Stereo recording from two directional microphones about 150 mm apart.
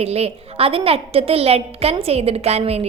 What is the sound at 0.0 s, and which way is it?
A woman's voice, 45° right (ahead or behind).